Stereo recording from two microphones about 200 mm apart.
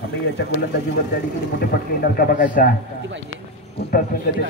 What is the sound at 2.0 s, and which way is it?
Speech, 45° left (ahead or behind).